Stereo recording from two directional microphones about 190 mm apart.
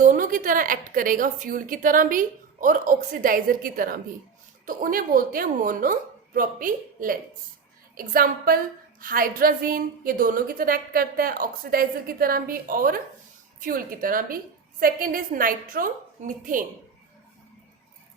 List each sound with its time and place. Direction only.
0.0 s a woman's voice: 45° right (ahead or behind)